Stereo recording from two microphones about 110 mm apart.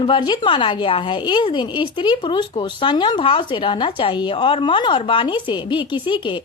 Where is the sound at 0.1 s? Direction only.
45° left (ahead or behind).